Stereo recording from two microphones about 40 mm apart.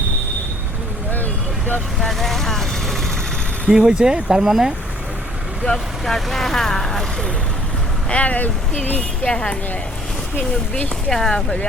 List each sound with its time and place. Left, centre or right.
1.1 s vehicle: left
2.0 s speech: centre
3.7 s speech: centre
5.6 s speech: centre
8.1 s speech: left
9.0 s speech: left
11.1 s speech: centre